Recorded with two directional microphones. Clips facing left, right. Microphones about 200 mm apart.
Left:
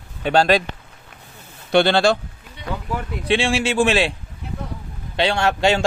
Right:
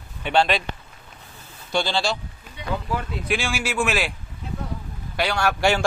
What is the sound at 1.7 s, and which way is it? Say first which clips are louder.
Speech: left 8 dB; 65° left (ahead or behind).